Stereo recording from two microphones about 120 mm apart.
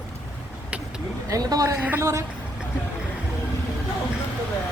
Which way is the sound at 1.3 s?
30° right (ahead or behind).